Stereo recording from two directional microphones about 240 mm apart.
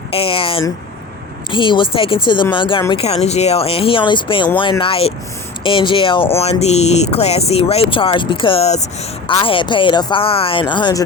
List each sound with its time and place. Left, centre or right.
0.1 s speech: left